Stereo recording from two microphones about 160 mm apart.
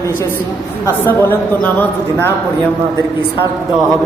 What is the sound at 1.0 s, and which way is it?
Speech, 15° left (ahead or behind).